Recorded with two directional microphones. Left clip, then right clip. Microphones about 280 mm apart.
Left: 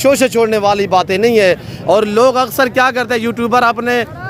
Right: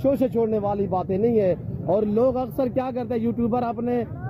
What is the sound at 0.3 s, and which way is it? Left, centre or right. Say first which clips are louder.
Speech: left 10 dB; left.